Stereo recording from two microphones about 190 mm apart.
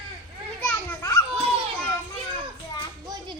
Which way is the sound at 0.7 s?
15° left (ahead or behind).